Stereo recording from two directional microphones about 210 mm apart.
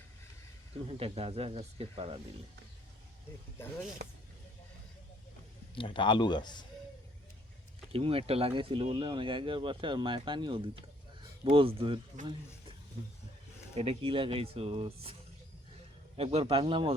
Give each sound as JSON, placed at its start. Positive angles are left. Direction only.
{"t": 0.9, "sound": "speech", "side_deg": -30}
{"t": 5.7, "sound": "a man's voice", "side_deg": 25}
{"t": 7.9, "sound": "speech", "side_deg": -25}
{"t": 13.7, "sound": "speech", "side_deg": -25}
{"t": 16.1, "sound": "speech", "side_deg": -30}